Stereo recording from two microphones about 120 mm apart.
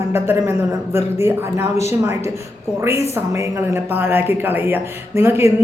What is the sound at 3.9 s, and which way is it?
Speech, 15° right (ahead or behind).